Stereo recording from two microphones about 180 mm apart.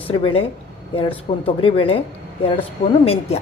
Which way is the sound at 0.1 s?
35° left (ahead or behind).